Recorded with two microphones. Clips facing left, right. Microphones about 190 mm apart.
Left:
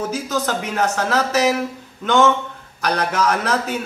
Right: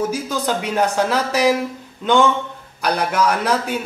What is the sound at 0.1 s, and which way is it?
A man's voice, 10° right (ahead or behind).